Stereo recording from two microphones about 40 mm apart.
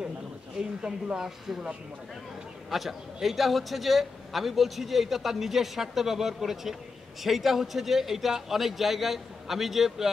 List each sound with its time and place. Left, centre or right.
0.6 s speech: centre
2.7 s a man's voice: centre